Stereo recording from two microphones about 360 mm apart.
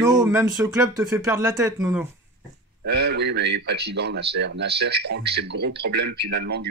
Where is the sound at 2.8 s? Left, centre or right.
Right.